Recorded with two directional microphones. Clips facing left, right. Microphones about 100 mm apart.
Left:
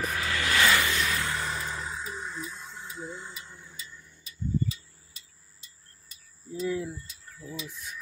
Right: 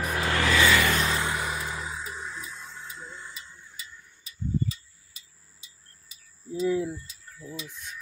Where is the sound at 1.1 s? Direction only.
20° right (ahead or behind); by 3.1 s 5° left (ahead or behind).